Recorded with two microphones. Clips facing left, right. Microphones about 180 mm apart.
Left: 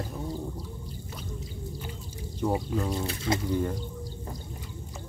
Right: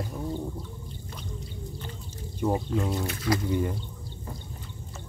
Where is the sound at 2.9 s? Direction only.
25° left (ahead or behind).